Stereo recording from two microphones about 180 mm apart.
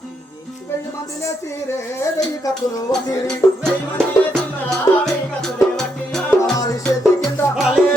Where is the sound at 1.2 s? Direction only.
15° left (ahead or behind).